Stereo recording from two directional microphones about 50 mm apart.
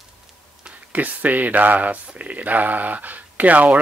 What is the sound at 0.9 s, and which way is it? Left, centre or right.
Speech, right.